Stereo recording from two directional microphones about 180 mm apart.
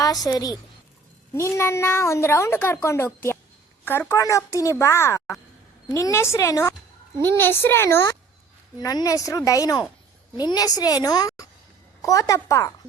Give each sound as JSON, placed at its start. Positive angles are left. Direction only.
{"t": 0.0, "sound": "a woman's voice", "side_deg": 20}